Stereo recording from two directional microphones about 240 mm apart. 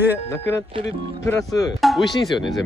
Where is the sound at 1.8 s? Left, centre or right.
Centre.